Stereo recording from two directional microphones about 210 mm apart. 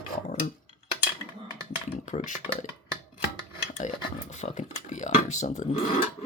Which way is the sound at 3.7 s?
35° left (ahead or behind).